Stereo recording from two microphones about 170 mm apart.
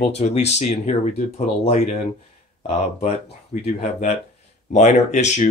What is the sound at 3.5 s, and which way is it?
Speech, 50° left (ahead or behind).